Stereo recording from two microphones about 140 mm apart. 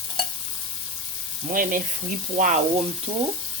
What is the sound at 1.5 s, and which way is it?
Speech, 85° right.